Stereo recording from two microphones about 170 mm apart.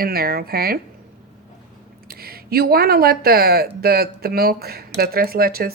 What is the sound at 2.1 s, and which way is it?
Speech, 65° right (ahead or behind).